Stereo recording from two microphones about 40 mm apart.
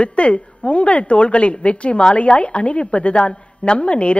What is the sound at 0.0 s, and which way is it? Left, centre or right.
A woman's voice, left.